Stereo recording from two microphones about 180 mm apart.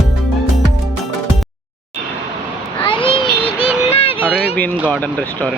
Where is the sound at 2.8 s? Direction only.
30° left (ahead or behind).